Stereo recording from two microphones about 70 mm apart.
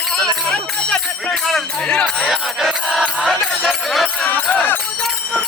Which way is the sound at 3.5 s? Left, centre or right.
Centre.